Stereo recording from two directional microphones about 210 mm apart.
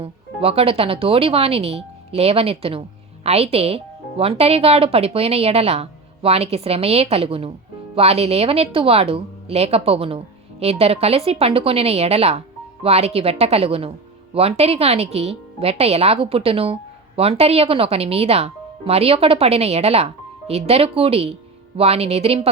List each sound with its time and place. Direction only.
0.0 s speech: 25° right (ahead or behind)